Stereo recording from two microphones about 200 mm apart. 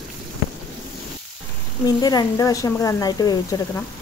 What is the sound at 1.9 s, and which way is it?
Speech, 20° left (ahead or behind).